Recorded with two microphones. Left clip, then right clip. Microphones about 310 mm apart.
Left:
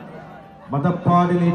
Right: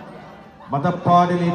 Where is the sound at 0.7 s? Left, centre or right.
Right.